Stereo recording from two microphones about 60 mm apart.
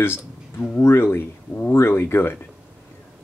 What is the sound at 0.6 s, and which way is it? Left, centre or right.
Speech, left.